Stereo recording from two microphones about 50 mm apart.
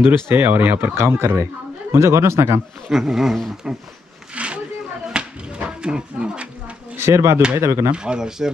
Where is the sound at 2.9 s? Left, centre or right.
Centre.